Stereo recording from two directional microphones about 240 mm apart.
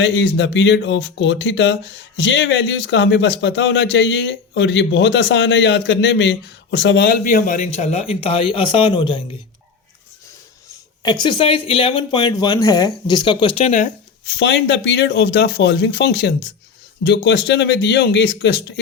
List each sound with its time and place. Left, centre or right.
0.0 s speech: left; by 9.2 s centre
11.0 s speech: centre
14.3 s speech: left